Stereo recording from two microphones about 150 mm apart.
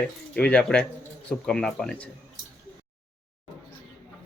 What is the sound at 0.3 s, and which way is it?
A man's voice, 10° left (ahead or behind).